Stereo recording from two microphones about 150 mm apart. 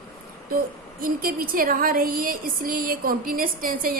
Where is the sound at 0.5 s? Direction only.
75° right (ahead or behind).